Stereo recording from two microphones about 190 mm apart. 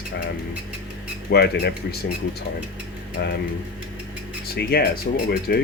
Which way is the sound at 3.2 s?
60° left (ahead or behind).